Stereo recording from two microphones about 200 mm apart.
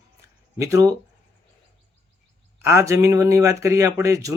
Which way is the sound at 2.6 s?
15° right (ahead or behind).